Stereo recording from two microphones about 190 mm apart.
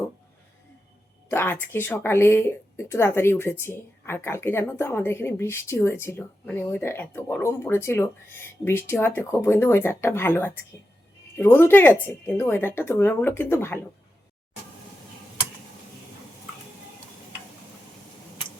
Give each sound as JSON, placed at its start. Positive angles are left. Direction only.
{"t": 1.3, "sound": "a woman's voice", "side_deg": 10}